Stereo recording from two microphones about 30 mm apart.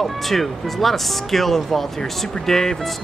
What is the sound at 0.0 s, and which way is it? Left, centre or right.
Speech, centre.